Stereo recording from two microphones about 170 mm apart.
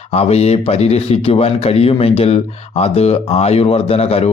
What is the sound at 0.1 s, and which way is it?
Speech, 40° left (ahead or behind).